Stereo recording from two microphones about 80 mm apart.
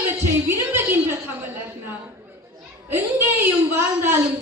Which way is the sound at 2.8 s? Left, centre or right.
Right.